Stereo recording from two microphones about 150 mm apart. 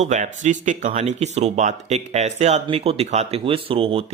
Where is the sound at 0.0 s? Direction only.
50° right (ahead or behind).